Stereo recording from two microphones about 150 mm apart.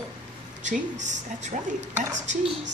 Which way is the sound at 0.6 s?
55° right (ahead or behind).